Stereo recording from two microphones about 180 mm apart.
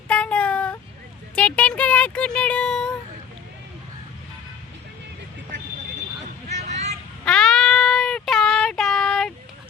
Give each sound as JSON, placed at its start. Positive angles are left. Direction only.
{"t": 0.1, "sound": "a sound", "side_deg": 5}
{"t": 6.5, "sound": "vehicle", "side_deg": -40}
{"t": 7.3, "sound": "child singing", "side_deg": 5}